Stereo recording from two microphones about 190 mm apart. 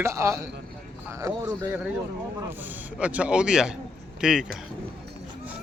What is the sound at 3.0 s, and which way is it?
Speech, 5° right (ahead or behind).